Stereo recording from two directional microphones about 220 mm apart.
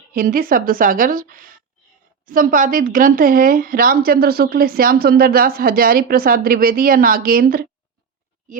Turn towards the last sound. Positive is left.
turn(degrees=-40)  # may be behind; listen again after turning